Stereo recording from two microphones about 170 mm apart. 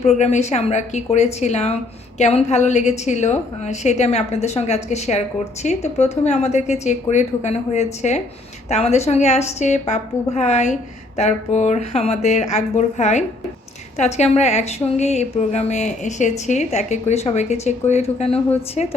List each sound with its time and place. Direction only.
0.2 s a woman's voice: 40° left (ahead or behind)